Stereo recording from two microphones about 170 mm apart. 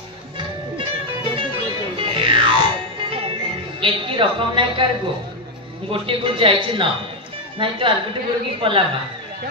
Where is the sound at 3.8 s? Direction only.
30° right (ahead or behind).